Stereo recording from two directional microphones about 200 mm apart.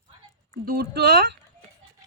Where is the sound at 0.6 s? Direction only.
55° right (ahead or behind).